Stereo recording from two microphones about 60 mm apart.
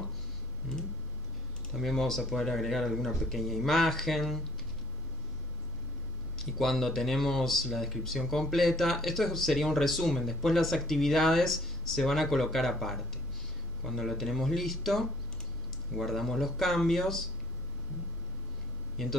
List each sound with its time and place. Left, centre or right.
1.7 s speech: centre
6.3 s speech: centre